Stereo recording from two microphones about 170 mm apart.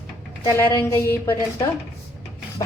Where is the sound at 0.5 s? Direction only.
15° left (ahead or behind).